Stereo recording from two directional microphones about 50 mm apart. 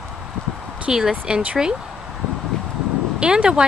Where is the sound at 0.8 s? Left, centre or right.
Centre.